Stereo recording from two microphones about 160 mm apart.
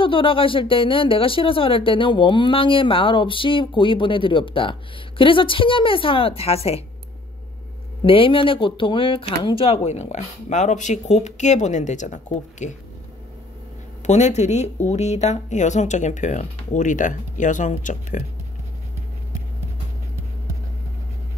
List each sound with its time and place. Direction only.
0.0 s speech: 35° left (ahead or behind)
8.0 s speech: 35° left (ahead or behind); by 12.7 s 50° left (ahead or behind)
14.0 s speech: 45° left (ahead or behind)